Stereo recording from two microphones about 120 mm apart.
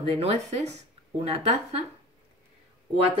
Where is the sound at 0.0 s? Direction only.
55° right (ahead or behind).